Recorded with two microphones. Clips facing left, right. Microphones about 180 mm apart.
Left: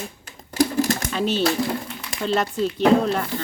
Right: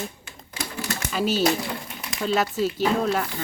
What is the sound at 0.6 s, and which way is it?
Typewriter, 45° left (ahead or behind).